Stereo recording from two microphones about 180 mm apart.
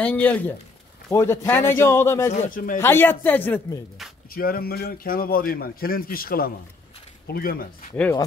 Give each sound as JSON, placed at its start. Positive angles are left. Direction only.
{"t": 0.0, "sound": "a man's voice", "side_deg": 10}
{"t": 2.4, "sound": "speech", "side_deg": 50}
{"t": 2.8, "sound": "a man's voice", "side_deg": 10}
{"t": 4.3, "sound": "a man's voice", "side_deg": 55}
{"t": 7.9, "sound": "a man's voice", "side_deg": 15}